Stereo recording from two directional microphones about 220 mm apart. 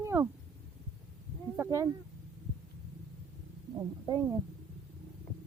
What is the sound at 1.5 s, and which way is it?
Speech, 10° right (ahead or behind).